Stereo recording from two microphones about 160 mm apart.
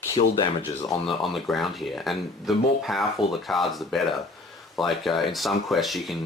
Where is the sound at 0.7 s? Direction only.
35° left (ahead or behind).